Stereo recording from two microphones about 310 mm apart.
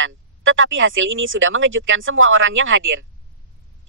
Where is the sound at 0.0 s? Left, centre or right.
Right.